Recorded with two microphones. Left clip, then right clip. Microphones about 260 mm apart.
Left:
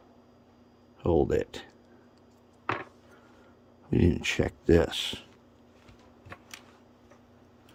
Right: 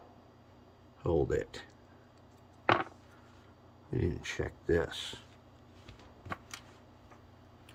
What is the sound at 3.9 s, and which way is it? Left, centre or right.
Speech, left.